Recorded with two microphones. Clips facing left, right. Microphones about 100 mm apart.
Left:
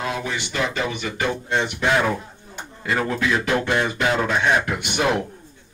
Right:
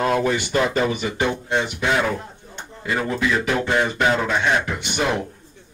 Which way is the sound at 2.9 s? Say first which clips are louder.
Left 1 dB; 5° right (ahead or behind).